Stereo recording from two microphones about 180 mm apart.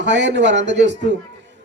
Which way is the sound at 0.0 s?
75° right (ahead or behind).